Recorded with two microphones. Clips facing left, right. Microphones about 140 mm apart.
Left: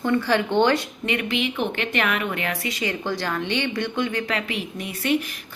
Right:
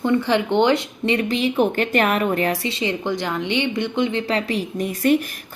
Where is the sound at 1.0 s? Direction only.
30° right (ahead or behind).